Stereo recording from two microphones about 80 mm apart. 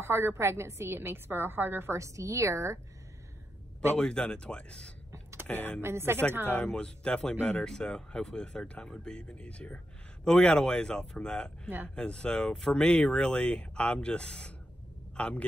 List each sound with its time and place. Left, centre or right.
0.0 s a woman's voice: right
3.9 s speech: centre
5.8 s a woman's voice: right
6.5 s speech: centre